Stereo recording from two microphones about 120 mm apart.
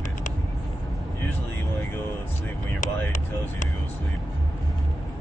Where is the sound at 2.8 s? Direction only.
90° left.